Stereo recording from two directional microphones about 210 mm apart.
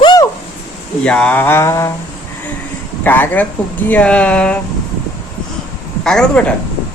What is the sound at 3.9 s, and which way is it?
Speech, 5° left (ahead or behind).